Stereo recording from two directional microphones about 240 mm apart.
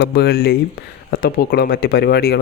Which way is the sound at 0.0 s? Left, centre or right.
Left.